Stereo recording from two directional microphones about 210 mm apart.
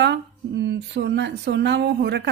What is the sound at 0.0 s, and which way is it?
Speech, 55° right (ahead or behind).